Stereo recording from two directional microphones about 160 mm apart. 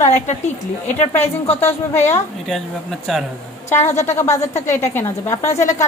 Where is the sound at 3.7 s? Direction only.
15° left (ahead or behind).